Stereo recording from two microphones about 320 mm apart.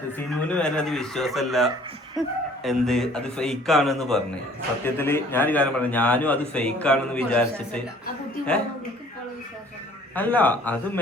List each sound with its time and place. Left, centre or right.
0.3 s a man's voice: centre
10.2 s a man's voice: centre